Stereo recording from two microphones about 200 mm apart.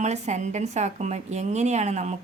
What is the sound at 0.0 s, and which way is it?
A woman's voice, 35° right (ahead or behind).